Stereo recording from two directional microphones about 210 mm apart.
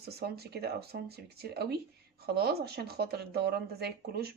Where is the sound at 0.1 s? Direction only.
50° right (ahead or behind).